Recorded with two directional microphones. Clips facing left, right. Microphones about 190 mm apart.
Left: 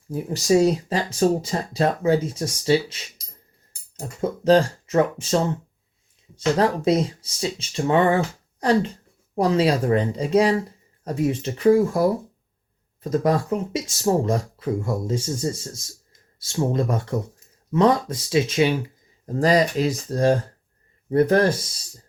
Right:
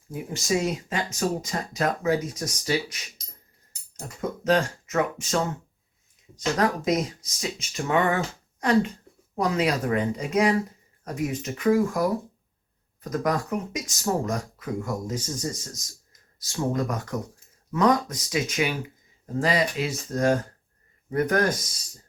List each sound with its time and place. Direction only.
0.1 s speech: 35° left (ahead or behind)
4.2 s speech: 30° left (ahead or behind)
9.4 s speech: 30° left (ahead or behind)
19.2 s speech: 40° left (ahead or behind)